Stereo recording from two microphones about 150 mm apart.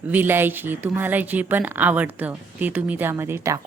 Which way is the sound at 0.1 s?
15° right (ahead or behind).